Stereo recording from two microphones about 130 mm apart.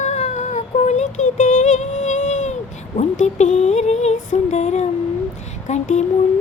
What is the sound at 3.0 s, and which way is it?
Female singing, 60° left (ahead or behind).